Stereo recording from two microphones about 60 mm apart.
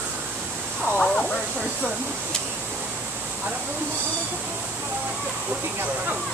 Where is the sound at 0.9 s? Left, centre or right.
Centre.